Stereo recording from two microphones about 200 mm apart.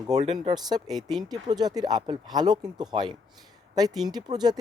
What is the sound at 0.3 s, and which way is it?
Speech, 20° right (ahead or behind).